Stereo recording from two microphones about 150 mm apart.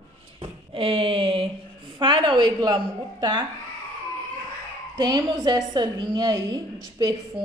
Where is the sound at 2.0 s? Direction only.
30° right (ahead or behind).